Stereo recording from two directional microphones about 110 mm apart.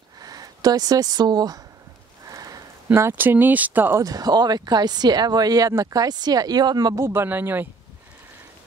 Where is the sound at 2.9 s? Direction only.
20° right (ahead or behind).